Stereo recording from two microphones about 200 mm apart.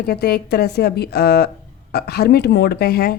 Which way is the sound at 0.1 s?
50° left (ahead or behind).